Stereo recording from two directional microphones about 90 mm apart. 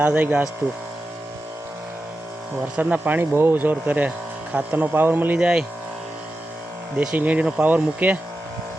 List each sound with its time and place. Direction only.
0.0 s speech: 15° right (ahead or behind)
2.7 s speech: 20° right (ahead or behind)
6.9 s speech: 15° right (ahead or behind)